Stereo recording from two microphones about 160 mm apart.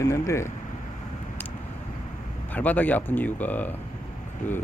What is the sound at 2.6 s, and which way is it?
Speech, 10° left (ahead or behind).